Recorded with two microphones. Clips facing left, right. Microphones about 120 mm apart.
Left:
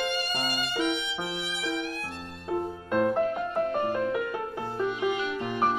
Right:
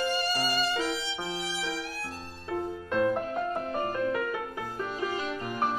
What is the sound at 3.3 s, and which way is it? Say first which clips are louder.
Music: left 3 dB; 40° right (ahead or behind).